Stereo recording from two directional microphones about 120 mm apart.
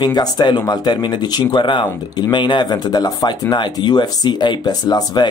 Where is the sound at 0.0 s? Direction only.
35° left (ahead or behind).